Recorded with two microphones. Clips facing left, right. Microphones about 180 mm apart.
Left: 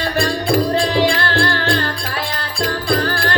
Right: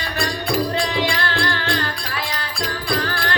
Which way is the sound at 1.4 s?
45° left (ahead or behind).